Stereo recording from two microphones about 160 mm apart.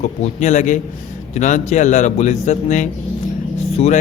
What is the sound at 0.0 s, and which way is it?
A man's voice, 45° left (ahead or behind).